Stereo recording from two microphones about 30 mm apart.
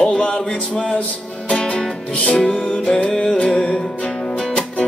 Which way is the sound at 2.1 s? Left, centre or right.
Left.